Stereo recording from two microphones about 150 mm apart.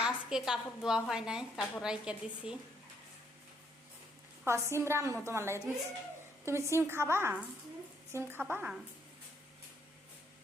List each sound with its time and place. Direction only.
0.0 s a woman's voice: 5° right (ahead or behind)
4.4 s a woman's voice: 20° right (ahead or behind)